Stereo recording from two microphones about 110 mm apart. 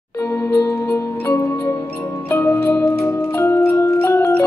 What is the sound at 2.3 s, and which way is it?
Music, 20° left (ahead or behind).